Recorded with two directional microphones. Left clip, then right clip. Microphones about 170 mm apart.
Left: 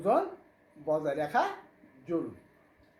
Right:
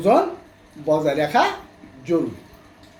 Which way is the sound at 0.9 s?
5° right (ahead or behind).